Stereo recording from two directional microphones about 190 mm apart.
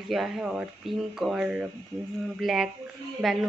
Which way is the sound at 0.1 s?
Centre (ahead or behind).